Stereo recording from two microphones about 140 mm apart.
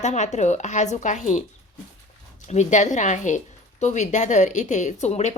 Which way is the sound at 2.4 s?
55° left (ahead or behind).